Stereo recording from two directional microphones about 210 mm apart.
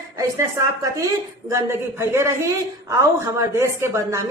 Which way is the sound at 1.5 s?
10° right (ahead or behind).